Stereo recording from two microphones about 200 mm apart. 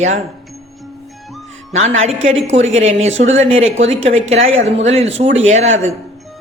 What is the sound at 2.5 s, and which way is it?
Speech, 35° right (ahead or behind).